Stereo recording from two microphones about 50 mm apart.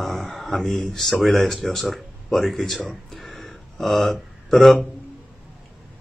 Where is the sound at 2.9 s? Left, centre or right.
Centre.